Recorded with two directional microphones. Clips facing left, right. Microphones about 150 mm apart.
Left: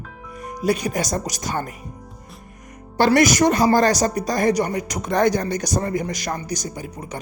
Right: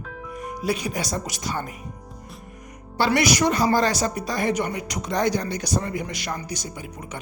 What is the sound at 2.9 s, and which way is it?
Speech, 45° left (ahead or behind).